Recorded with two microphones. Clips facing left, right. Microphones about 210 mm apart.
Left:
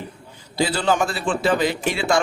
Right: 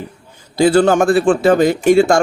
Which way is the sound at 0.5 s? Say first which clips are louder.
Right 10 dB; 50° right (ahead or behind).